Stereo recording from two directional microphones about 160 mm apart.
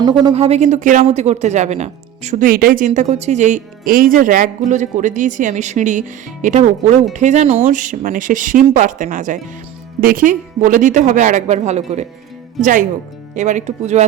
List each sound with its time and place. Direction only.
0.3 s speech: 40° right (ahead or behind)
7.7 s speech: 55° right (ahead or behind)
12.6 s speech: centre (ahead or behind)
13.3 s speech: 50° right (ahead or behind)